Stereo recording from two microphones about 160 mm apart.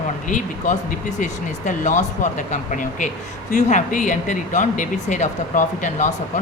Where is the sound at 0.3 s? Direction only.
55° left (ahead or behind).